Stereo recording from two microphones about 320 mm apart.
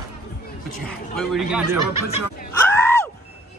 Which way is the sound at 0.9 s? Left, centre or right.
Centre.